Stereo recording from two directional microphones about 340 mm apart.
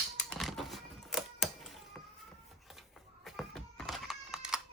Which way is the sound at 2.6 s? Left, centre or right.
Centre.